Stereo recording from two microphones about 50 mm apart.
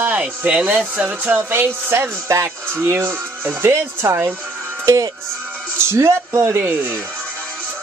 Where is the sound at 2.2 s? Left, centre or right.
Right.